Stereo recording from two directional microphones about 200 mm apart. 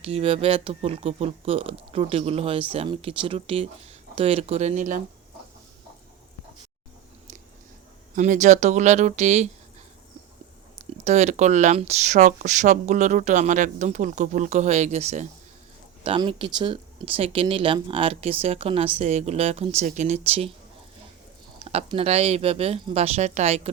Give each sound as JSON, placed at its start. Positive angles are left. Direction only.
{"t": 0.0, "sound": "speech", "side_deg": -30}
{"t": 8.1, "sound": "speech", "side_deg": -40}
{"t": 11.0, "sound": "speech", "side_deg": -35}
{"t": 16.0, "sound": "speech", "side_deg": -25}
{"t": 21.6, "sound": "speech", "side_deg": -30}